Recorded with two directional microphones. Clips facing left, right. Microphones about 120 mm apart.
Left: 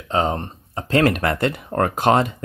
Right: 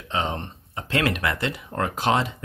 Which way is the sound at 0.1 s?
40° left (ahead or behind).